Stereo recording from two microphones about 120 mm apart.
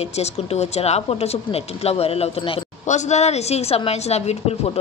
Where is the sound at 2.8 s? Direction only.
75° left (ahead or behind).